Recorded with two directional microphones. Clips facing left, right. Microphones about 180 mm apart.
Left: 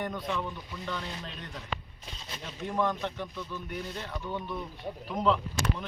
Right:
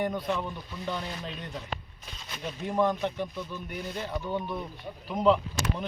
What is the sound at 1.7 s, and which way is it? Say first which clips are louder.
Speech: left 4 dB; 45° right (ahead or behind).